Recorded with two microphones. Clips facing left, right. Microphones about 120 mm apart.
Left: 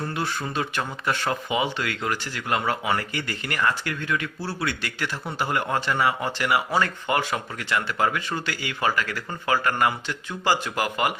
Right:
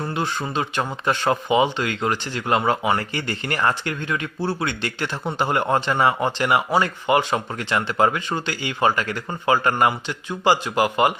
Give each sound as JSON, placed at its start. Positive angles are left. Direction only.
{"t": 0.6, "sound": "speech", "side_deg": -35}
{"t": 6.7, "sound": "speech", "side_deg": -15}